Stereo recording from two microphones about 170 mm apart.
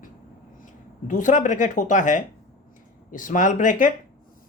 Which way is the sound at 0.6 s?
50° left (ahead or behind).